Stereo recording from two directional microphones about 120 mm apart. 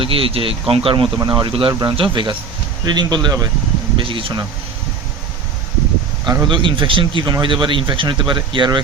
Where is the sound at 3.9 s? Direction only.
45° right (ahead or behind).